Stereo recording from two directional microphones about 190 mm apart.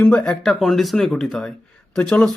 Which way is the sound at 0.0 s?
5° left (ahead or behind).